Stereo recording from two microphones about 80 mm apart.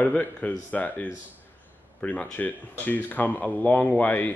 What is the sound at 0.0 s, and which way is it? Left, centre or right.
Speech, centre.